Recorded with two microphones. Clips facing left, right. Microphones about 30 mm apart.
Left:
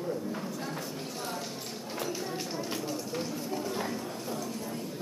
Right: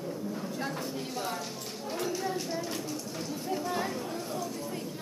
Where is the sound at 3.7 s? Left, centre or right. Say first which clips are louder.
Right 2 dB; centre.